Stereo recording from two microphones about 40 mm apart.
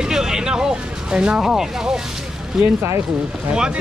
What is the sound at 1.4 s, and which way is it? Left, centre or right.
Speech, centre.